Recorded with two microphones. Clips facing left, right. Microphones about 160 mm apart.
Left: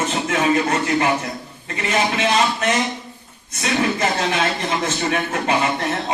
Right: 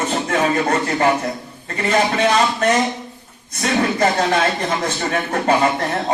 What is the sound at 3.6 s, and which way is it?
Speech, 40° right (ahead or behind).